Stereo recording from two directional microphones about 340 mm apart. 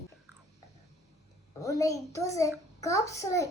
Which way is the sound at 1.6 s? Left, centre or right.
Centre.